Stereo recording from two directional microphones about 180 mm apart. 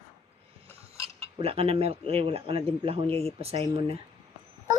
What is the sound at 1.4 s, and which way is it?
Speech, 35° right (ahead or behind).